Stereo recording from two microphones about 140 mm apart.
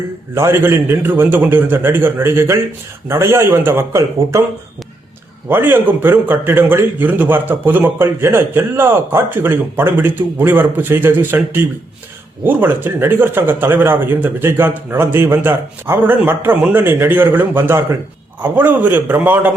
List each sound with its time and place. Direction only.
0.3 s a man's voice: 20° right (ahead or behind)
5.5 s a man's voice: 15° right (ahead or behind)